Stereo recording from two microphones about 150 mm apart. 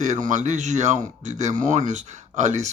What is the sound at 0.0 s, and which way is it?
Speech, 55° right (ahead or behind).